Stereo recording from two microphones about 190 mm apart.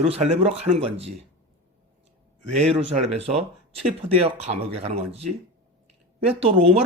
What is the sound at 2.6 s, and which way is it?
Speech, 35° right (ahead or behind).